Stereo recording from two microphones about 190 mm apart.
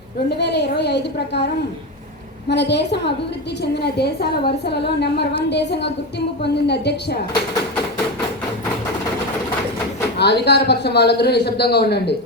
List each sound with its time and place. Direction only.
0.3 s a man's voice: 60° left (ahead or behind)
2.5 s a man's voice: 65° left (ahead or behind)
10.2 s a man's voice: 60° left (ahead or behind)